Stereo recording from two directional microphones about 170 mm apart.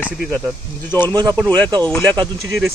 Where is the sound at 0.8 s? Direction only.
10° left (ahead or behind).